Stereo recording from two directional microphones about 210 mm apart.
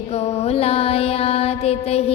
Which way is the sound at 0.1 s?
30° left (ahead or behind).